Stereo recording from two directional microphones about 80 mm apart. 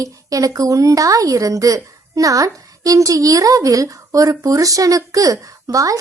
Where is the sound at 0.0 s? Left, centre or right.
Right.